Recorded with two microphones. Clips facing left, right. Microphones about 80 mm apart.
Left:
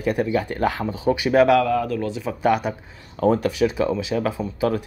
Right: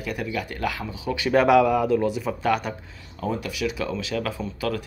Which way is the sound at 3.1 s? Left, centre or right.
Left.